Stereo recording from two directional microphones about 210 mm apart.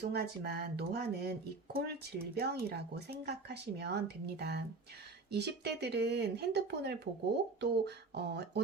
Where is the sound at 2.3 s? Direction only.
50° right (ahead or behind).